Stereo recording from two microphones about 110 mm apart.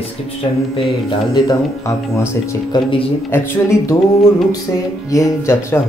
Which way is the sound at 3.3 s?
25° left (ahead or behind).